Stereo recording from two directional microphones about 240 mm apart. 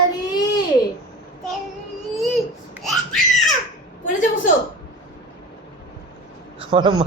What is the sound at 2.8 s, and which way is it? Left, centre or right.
Crying, centre.